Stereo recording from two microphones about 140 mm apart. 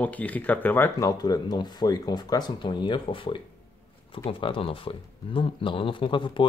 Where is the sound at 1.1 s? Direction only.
30° left (ahead or behind).